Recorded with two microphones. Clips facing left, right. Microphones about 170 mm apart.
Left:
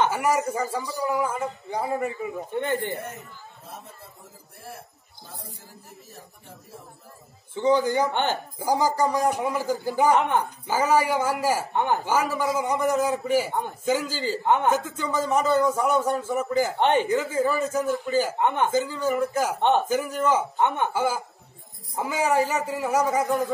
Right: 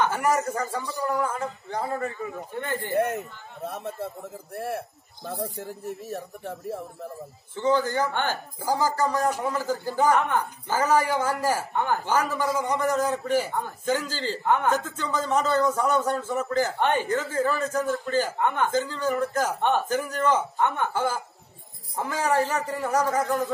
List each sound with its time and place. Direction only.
0.1 s speech: 5° left (ahead or behind)
3.6 s speech: 75° right (ahead or behind)
7.5 s speech: 15° left (ahead or behind)
10.7 s speech: 10° left (ahead or behind)
11.7 s speech: 20° left (ahead or behind)
12.1 s speech: 10° left (ahead or behind)
14.4 s speech: 20° left (ahead or behind)
17.1 s speech: 10° left (ahead or behind)
18.4 s speech: 20° left (ahead or behind)
18.7 s speech: 10° left (ahead or behind)
20.5 s speech: 20° left (ahead or behind)
20.9 s speech: 10° left (ahead or behind)